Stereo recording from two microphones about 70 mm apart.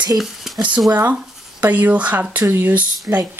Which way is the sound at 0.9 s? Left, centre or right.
Right.